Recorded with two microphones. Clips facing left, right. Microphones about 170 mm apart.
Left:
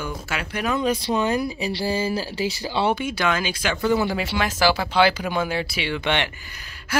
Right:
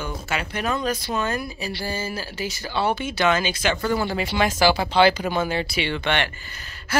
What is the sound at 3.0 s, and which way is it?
Speech, 10° left (ahead or behind).